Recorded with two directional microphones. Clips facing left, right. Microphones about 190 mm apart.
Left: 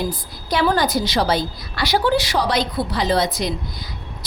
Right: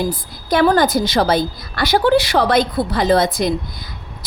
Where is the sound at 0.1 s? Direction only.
50° right (ahead or behind).